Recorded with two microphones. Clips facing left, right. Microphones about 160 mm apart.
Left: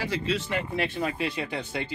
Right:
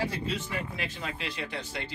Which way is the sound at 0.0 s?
90° left.